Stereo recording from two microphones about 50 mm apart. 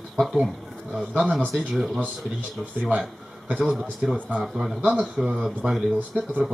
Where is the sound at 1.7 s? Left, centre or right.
Centre.